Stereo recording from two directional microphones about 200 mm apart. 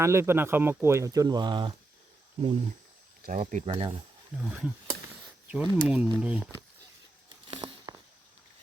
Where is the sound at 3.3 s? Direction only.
35° right (ahead or behind).